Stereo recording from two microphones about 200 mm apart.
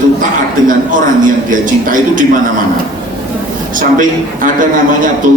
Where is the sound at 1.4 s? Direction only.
40° right (ahead or behind).